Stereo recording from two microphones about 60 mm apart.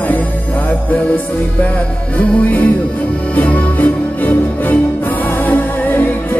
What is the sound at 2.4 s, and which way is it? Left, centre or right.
Music, left.